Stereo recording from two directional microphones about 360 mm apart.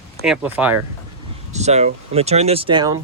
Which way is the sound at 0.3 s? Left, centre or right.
Centre.